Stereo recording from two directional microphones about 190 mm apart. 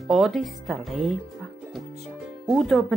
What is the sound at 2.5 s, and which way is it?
Speech, centre (ahead or behind).